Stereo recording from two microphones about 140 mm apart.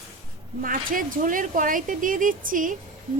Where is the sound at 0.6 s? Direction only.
80° right.